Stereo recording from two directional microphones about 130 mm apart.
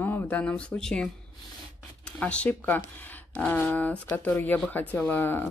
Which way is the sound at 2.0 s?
10° left (ahead or behind).